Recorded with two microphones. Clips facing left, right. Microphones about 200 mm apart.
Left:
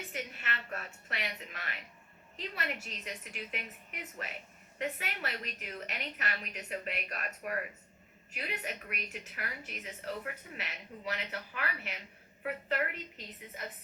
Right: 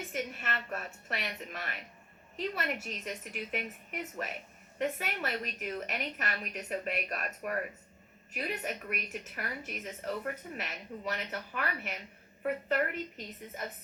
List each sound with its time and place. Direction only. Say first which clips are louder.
0.2 s a woman's voice: right 4 dB; 45° right (ahead or behind)